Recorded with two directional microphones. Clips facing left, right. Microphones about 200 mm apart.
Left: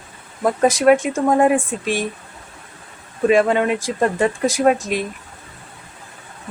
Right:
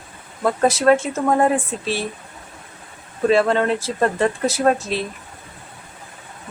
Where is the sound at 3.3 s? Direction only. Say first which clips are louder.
Left 1 dB; 15° left (ahead or behind).